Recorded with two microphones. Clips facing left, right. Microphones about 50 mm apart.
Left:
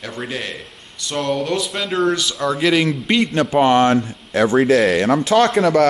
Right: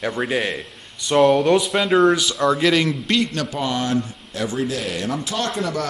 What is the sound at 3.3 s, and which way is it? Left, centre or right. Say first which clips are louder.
Speech: left 7 dB; left.